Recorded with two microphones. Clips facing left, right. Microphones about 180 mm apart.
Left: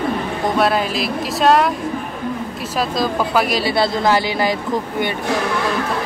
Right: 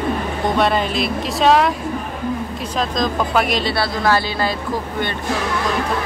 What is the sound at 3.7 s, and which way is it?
Speech, 20° left (ahead or behind).